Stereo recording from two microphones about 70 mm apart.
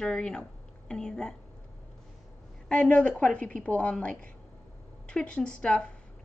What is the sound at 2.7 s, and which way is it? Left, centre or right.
Speech, centre.